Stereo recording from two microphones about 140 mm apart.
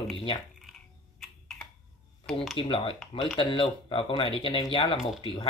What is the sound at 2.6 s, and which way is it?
Speech, 40° left (ahead or behind).